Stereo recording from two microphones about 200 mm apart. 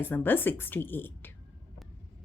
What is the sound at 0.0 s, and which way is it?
A woman's voice, 10° left (ahead or behind).